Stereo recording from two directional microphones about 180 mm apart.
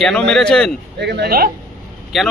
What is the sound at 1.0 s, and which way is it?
Speech, 65° right (ahead or behind).